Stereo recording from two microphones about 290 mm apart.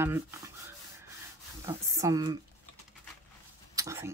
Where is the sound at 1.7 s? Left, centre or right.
Centre.